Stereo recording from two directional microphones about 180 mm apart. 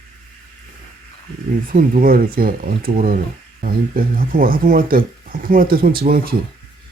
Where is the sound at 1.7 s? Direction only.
50° right (ahead or behind).